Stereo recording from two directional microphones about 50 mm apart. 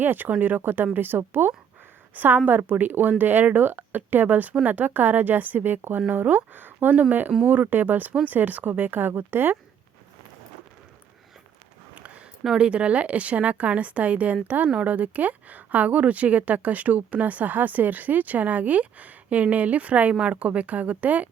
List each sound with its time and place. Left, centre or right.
0.0 s a woman's voice: right
6.1 s speech: right
11.9 s a sound: right
12.5 s a woman's voice: right